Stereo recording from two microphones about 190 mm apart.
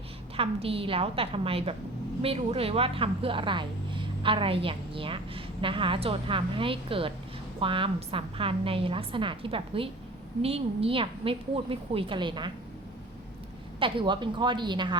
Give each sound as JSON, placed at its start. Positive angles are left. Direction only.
{"t": 0.3, "sound": "speech", "side_deg": -30}
{"t": 13.7, "sound": "speech", "side_deg": -25}